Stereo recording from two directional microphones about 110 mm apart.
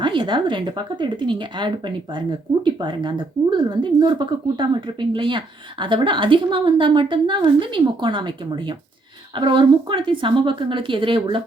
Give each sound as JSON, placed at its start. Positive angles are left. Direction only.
{"t": 0.0, "sound": "a woman's voice", "side_deg": -45}
{"t": 2.8, "sound": "a woman's voice", "side_deg": -45}